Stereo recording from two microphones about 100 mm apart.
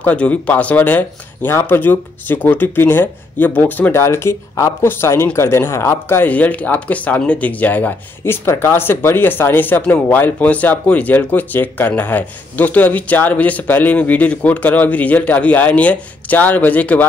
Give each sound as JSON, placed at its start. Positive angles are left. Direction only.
{"t": 0.0, "sound": "speech", "side_deg": 15}